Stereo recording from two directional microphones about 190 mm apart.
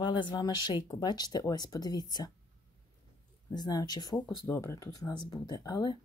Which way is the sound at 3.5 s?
20° left (ahead or behind).